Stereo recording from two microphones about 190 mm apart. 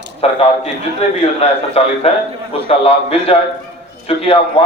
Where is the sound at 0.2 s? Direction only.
30° left (ahead or behind).